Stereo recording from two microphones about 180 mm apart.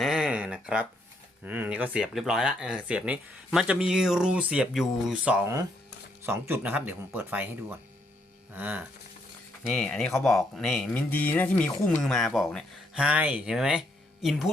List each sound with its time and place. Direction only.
0.0 s a sound: 5° right (ahead or behind)
1.5 s speech: 10° right (ahead or behind)
8.5 s speech: 10° right (ahead or behind)
9.6 s speech: 5° left (ahead or behind)